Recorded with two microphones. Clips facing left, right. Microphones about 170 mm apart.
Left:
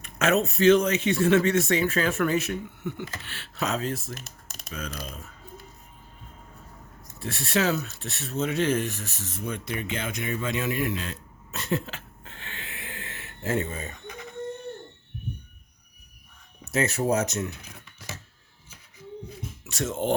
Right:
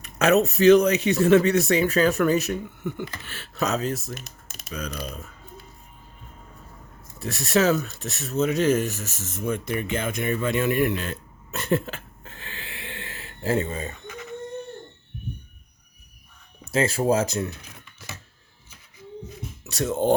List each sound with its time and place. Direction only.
0.0 s speech: 40° right (ahead or behind)
7.2 s speech: 40° right (ahead or behind)
16.7 s speech: 30° right (ahead or behind)
19.6 s speech: 35° right (ahead or behind)